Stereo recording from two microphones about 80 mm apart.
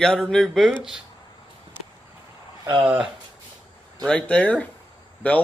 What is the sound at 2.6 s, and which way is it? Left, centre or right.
Speech, right.